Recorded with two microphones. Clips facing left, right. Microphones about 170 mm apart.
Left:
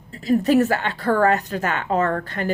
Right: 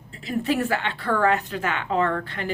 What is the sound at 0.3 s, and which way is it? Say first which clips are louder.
Speech: left 7 dB; 40° left (ahead or behind).